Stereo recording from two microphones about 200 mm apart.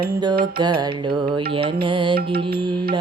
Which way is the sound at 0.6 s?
20° right (ahead or behind).